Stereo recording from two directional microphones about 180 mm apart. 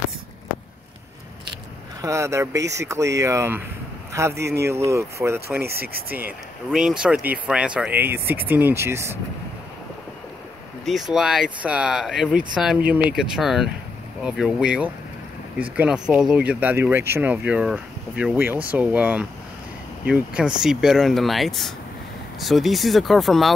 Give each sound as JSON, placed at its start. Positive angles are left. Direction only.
{"t": 2.0, "sound": "speech", "side_deg": -15}
{"t": 5.7, "sound": "speech", "side_deg": -60}
{"t": 6.7, "sound": "speech", "side_deg": -5}
{"t": 10.9, "sound": "speech", "side_deg": 0}